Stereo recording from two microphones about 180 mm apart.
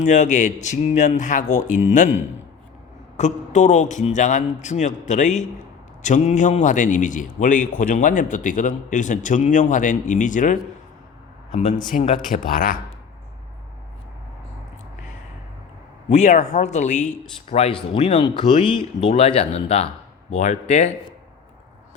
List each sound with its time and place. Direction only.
0.0 s a man's voice: 40° left (ahead or behind)
3.2 s a man's voice: 40° left (ahead or behind)
11.9 s a man's voice: 45° left (ahead or behind)
16.0 s a man's voice: 40° left (ahead or behind)